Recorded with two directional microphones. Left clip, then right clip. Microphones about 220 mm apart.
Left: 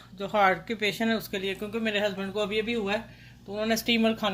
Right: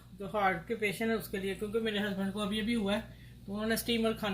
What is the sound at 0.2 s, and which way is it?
Speech, 45° left (ahead or behind).